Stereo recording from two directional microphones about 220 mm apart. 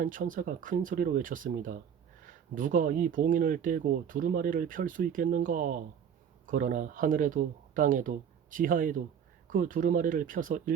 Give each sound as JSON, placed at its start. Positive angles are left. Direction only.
{"t": 0.0, "sound": "speech", "side_deg": -40}